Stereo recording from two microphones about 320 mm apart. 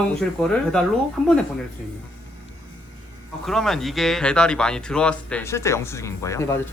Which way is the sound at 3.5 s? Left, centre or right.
Centre.